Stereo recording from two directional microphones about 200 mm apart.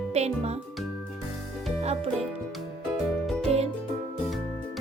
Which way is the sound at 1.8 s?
30° right (ahead or behind).